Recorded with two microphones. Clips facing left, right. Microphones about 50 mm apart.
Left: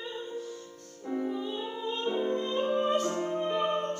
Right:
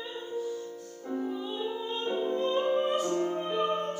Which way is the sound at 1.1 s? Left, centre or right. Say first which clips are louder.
Left 1 dB; left.